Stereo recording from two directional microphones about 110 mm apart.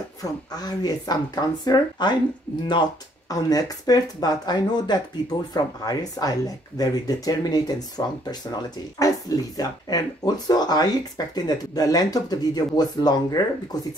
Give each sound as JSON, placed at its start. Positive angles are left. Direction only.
{"t": 0.2, "sound": "speech", "side_deg": 35}